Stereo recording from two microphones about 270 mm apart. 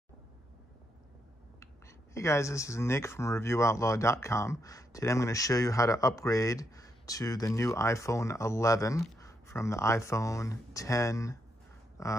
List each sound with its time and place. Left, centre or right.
2.1 s speech: centre